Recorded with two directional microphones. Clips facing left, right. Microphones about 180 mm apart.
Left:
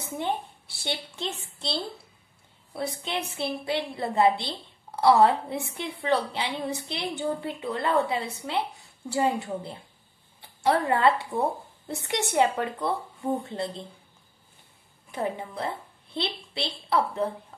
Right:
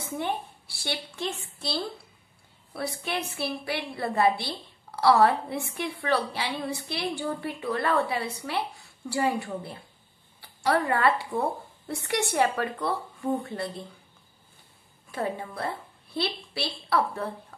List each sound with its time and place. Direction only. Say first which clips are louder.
0.0 s a woman's voice: left 1 dB; 20° left (ahead or behind)
15.0 s a woman's voice: even; 20° left (ahead or behind)